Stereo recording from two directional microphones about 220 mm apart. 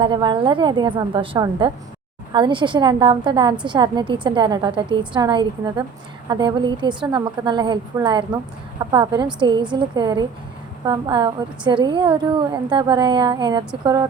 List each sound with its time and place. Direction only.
0.0 s a woman's voice: 20° right (ahead or behind)